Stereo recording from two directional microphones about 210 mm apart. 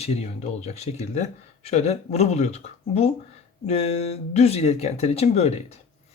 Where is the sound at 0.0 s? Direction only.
30° left (ahead or behind).